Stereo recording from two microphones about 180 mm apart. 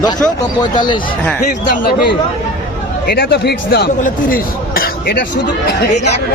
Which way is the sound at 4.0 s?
50° left (ahead or behind).